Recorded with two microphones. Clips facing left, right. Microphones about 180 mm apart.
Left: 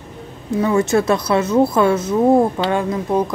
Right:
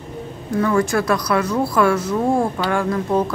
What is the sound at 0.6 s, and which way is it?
Speech, 25° left (ahead or behind).